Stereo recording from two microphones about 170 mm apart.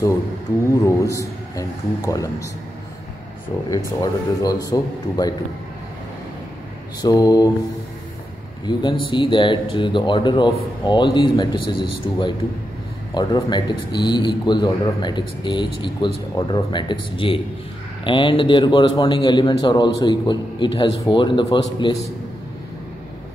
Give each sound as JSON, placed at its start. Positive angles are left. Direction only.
{"t": 0.8, "sound": "a man's voice", "side_deg": 20}
{"t": 3.7, "sound": "a man's voice", "side_deg": 20}
{"t": 7.0, "sound": "a man's voice", "side_deg": 20}
{"t": 8.6, "sound": "a man's voice", "side_deg": 30}